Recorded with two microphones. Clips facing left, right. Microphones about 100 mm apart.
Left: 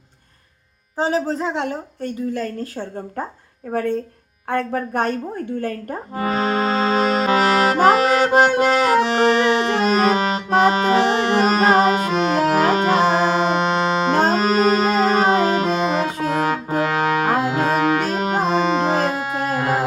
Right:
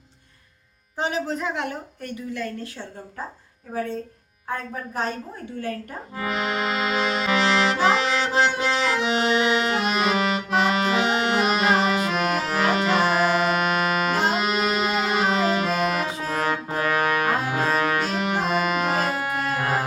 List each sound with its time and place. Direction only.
0.9 s a woman's voice: 35° left (ahead or behind)
3.7 s speech: 60° left (ahead or behind)
4.4 s music: 65° left (ahead or behind); by 12.1 s 40° left (ahead or behind)
12.1 s music: 30° left (ahead or behind)
14.2 s music: 40° left (ahead or behind)
16.2 s brass instrument: 20° left (ahead or behind)
18.0 s music: 40° left (ahead or behind)
18.5 s music: 25° left (ahead or behind)